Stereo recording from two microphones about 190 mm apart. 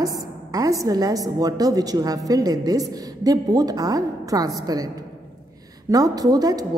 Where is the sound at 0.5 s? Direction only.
20° right (ahead or behind).